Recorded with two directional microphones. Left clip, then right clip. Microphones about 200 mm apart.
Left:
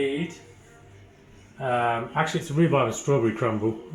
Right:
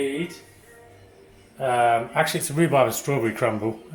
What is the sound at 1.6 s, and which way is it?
Speech, 35° right (ahead or behind).